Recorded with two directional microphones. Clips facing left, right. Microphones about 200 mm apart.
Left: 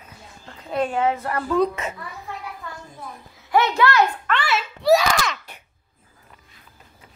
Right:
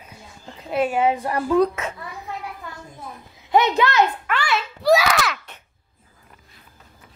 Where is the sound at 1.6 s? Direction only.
Centre (ahead or behind).